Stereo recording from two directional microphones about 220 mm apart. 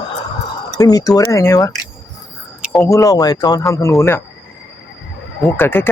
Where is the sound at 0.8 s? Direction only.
15° left (ahead or behind).